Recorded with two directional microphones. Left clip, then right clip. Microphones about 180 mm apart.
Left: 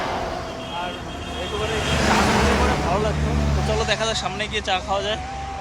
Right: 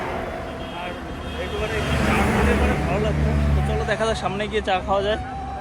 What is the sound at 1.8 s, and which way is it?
Speech, 60° left (ahead or behind).